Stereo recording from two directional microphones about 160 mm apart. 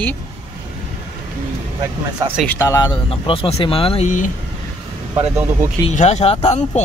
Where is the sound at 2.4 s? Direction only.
20° left (ahead or behind); by 4.3 s 50° left (ahead or behind).